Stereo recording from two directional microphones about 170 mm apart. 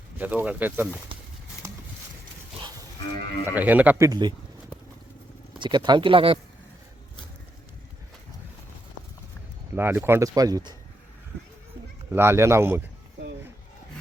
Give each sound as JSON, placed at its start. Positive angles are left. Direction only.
{"t": 0.2, "sound": "speech", "side_deg": -10}
{"t": 3.4, "sound": "speech", "side_deg": -10}
{"t": 5.5, "sound": "speech", "side_deg": -25}
{"t": 9.7, "sound": "speech", "side_deg": -10}
{"t": 12.1, "sound": "speech", "side_deg": -15}